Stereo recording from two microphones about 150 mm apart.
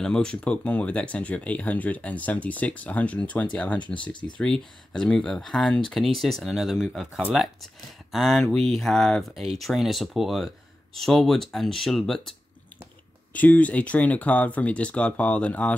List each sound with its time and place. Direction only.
0.0 s speech: 5° left (ahead or behind)
4.1 s speech: 30° left (ahead or behind)
4.4 s speech: 5° left (ahead or behind)